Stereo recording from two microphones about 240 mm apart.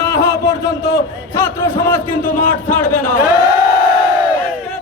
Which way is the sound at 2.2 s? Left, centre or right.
Left.